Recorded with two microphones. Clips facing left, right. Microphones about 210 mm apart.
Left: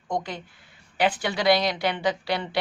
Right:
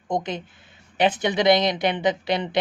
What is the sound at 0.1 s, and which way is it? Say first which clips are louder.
A woman's voice: right 3 dB; 20° right (ahead or behind).